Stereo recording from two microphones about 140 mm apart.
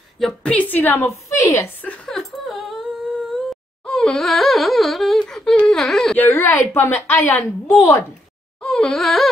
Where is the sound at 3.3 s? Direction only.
5° left (ahead or behind).